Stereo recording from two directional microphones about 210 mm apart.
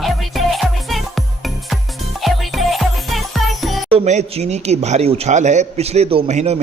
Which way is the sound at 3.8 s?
30° right (ahead or behind).